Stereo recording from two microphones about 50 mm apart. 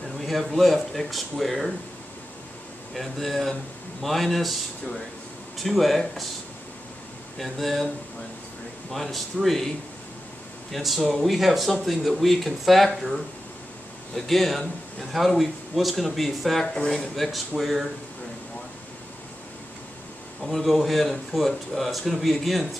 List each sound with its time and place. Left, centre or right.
0.2 s a man's voice: centre
2.9 s speech: centre
5.6 s speech: centre
7.3 s speech: centre
8.9 s speech: centre
10.7 s speech: centre
16.6 s speech: centre
17.1 s speech: centre
20.4 s speech: centre